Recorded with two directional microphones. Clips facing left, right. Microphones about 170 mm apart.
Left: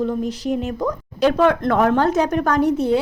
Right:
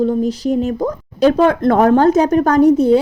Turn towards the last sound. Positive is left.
turn(degrees=-40)  # may be behind; listen again after turning